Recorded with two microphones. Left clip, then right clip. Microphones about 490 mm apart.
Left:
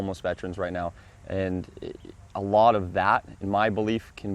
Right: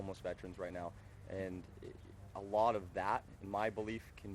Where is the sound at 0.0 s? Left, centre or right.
Left.